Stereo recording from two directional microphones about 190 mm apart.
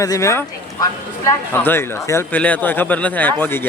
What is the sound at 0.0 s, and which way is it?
Speech, 15° left (ahead or behind).